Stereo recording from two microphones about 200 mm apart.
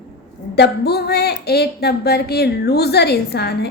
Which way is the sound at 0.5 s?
55° left (ahead or behind).